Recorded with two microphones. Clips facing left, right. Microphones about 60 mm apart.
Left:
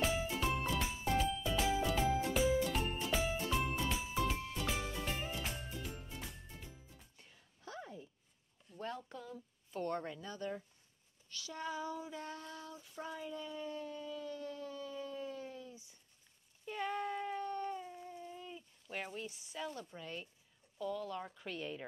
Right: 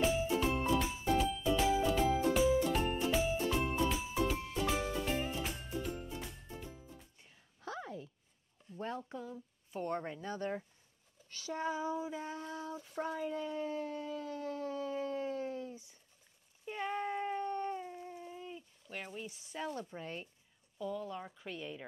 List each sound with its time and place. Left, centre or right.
0.0 s music: centre
7.6 s a sound: right
8.6 s speech: right
11.3 s child singing: right
12.7 s speech: right
14.4 s howl: right
14.7 s dog: right
16.6 s cat: centre
18.9 s a woman's voice: centre
19.2 s child singing: right
20.7 s a woman's voice: centre